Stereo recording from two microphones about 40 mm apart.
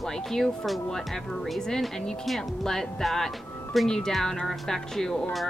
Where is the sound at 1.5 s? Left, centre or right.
Centre.